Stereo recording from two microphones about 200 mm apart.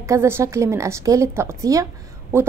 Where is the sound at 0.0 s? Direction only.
15° right (ahead or behind).